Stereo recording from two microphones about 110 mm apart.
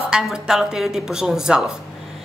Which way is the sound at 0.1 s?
5° right (ahead or behind).